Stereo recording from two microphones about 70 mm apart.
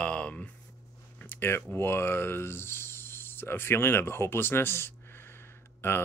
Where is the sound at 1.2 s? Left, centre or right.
Left.